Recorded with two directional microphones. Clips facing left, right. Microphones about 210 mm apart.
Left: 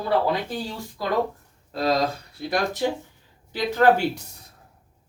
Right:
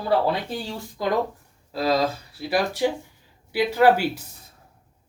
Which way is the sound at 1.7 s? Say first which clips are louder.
Right 1 dB; 5° right (ahead or behind).